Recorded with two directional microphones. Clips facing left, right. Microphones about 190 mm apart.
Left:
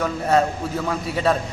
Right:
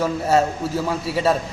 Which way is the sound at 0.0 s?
5° right (ahead or behind).